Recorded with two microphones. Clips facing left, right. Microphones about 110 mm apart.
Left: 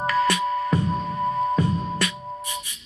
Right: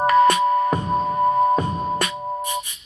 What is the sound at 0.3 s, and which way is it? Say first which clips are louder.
Music: right 5 dB; 50° right (ahead or behind).